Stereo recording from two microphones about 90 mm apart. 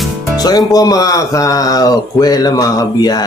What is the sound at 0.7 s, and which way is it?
Speech, 45° left (ahead or behind).